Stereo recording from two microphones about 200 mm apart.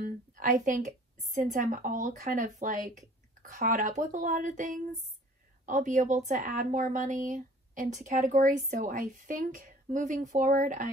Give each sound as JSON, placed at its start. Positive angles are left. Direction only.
{"t": 0.0, "sound": "a woman's voice", "side_deg": -45}